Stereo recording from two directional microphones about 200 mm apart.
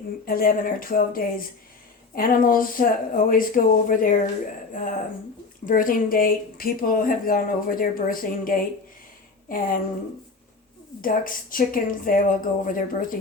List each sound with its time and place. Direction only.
0.3 s speech: 45° left (ahead or behind)
11.0 s speech: 45° left (ahead or behind)